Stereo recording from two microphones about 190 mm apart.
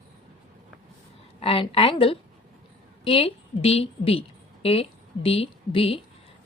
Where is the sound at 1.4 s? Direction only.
30° left (ahead or behind).